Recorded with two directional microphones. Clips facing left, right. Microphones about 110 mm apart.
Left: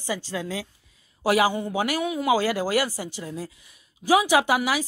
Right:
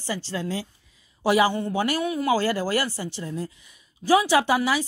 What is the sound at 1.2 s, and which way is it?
Speech, 5° left (ahead or behind).